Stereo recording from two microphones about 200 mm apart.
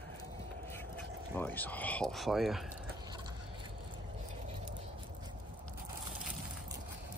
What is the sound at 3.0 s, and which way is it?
Vehicle, 20° right (ahead or behind).